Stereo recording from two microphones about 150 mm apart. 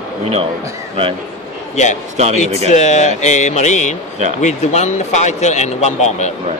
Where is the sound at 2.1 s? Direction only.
45° right (ahead or behind).